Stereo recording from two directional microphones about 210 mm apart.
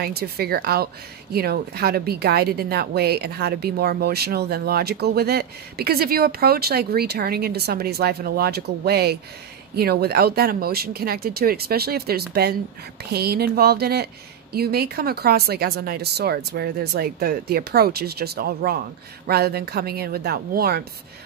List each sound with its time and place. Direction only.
0.0 s speech: 50° right (ahead or behind)